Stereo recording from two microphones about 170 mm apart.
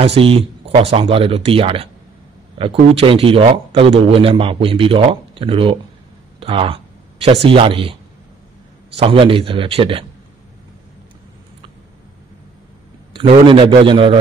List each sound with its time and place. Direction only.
0.0 s a man's voice: 35° right (ahead or behind)
6.4 s a sound: 35° right (ahead or behind)
7.4 s a man's voice: 30° right (ahead or behind)
13.1 s a man's voice: 30° right (ahead or behind)